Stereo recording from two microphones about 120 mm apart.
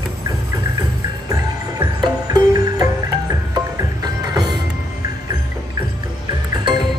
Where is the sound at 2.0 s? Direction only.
35° right (ahead or behind).